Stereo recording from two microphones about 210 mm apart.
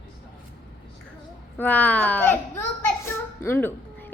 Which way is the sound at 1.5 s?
10° left (ahead or behind).